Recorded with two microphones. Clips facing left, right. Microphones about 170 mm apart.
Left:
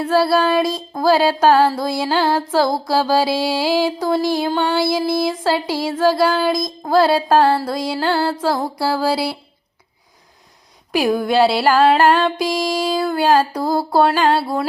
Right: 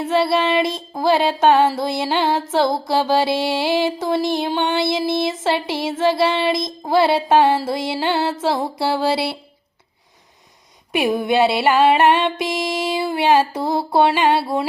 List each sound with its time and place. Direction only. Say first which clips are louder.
0.0 s music: left 2 dB; centre (ahead or behind)
11.2 s music: left 1 dB; centre (ahead or behind)